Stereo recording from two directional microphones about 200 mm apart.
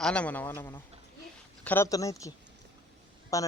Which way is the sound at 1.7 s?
15° left (ahead or behind).